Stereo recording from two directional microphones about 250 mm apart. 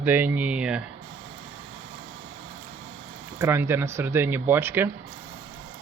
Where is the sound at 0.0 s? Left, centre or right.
Centre.